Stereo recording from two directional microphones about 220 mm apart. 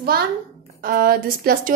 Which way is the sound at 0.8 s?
40° right (ahead or behind).